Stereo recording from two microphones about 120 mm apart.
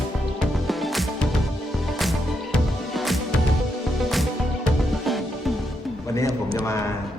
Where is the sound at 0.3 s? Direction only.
Centre (ahead or behind).